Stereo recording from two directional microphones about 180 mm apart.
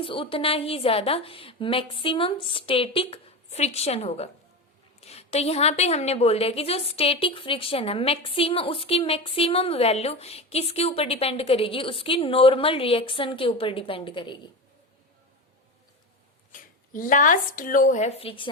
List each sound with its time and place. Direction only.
0.0 s a woman's voice: 30° left (ahead or behind)
16.5 s speech: 50° left (ahead or behind); by 18.5 s 30° left (ahead or behind)